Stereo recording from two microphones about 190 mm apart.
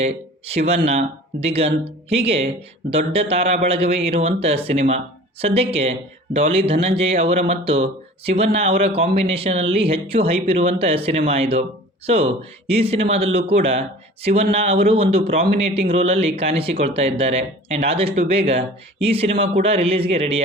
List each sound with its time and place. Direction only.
0.0 s speech: 30° right (ahead or behind)